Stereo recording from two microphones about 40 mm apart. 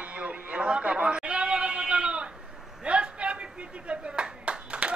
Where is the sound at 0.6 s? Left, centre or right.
Right.